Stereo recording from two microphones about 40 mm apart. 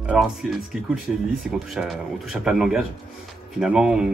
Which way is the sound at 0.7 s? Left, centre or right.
Centre.